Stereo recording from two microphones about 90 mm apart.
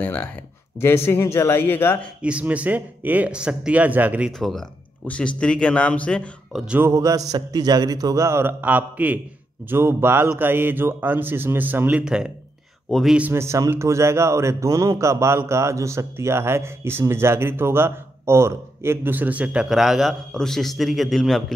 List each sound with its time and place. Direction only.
0.0 s speech: 20° left (ahead or behind)
2.2 s speech: 15° right (ahead or behind)
4.4 s speech: 5° left (ahead or behind)
5.0 s a man's voice: 15° left (ahead or behind)
6.5 s speech: 10° right (ahead or behind)
6.8 s a man's voice: 35° right (ahead or behind)
12.0 s speech: 10° right (ahead or behind)
12.9 s a man's voice: 5° left (ahead or behind)
13.3 s a man's voice: 30° right (ahead or behind); by 21.5 s centre (ahead or behind)